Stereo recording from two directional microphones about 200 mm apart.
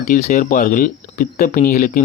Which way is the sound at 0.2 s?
45° left (ahead or behind).